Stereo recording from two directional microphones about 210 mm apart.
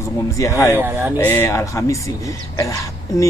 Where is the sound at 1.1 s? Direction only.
10° left (ahead or behind).